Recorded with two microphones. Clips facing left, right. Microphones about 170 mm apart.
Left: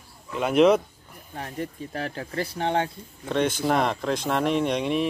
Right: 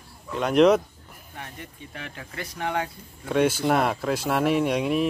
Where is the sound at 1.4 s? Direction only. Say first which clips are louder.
Left 8 dB; 35° left (ahead or behind).